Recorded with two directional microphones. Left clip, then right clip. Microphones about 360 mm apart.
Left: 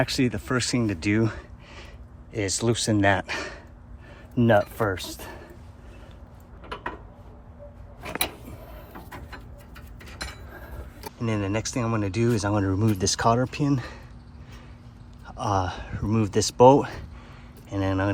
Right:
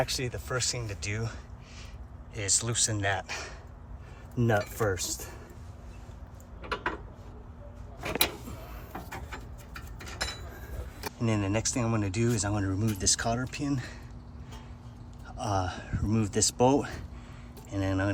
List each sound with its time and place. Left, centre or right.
0.0 s speech: left
11.3 s speech: centre
15.3 s speech: centre